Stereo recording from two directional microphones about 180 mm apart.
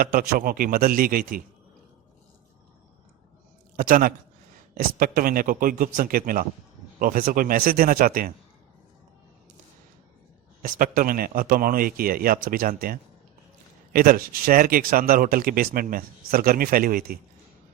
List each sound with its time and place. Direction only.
0.0 s speech: 50° right (ahead or behind)
3.8 s speech: 50° right (ahead or behind)
10.6 s speech: 50° right (ahead or behind)